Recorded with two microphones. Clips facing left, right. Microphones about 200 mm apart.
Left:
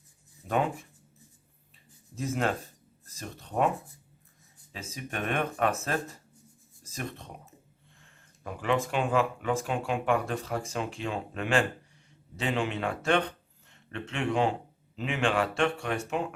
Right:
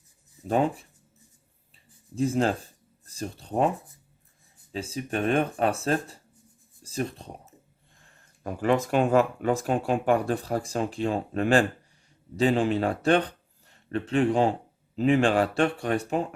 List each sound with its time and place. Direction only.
0.4 s speech: 30° right (ahead or behind)
2.1 s speech: 30° right (ahead or behind)
4.7 s speech: 30° right (ahead or behind)